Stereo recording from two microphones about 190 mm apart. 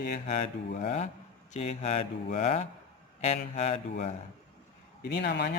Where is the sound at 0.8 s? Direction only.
35° left (ahead or behind).